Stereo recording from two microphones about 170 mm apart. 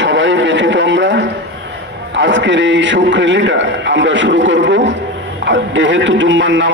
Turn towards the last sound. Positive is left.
turn(degrees=-90)